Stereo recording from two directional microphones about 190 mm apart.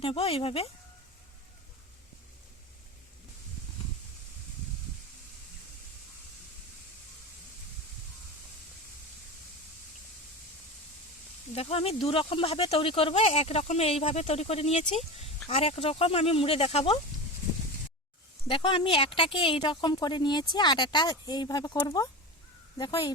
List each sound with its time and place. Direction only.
0.0 s speech: 30° left (ahead or behind)
11.5 s speech: 30° left (ahead or behind)
18.4 s speech: 25° left (ahead or behind)